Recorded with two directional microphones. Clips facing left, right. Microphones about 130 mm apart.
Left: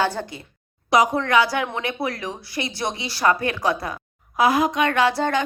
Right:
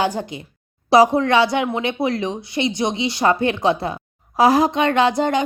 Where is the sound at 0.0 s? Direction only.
15° right (ahead or behind).